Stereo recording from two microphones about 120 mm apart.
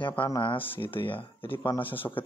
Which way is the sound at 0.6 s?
15° left (ahead or behind).